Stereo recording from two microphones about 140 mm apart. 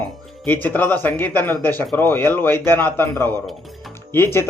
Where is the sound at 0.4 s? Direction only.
10° left (ahead or behind).